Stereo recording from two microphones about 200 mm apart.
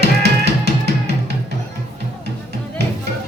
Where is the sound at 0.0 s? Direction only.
55° right (ahead or behind).